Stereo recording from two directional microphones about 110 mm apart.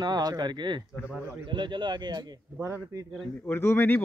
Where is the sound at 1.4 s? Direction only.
45° right (ahead or behind).